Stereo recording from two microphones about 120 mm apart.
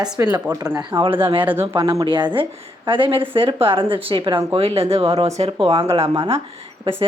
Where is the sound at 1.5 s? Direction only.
20° right (ahead or behind).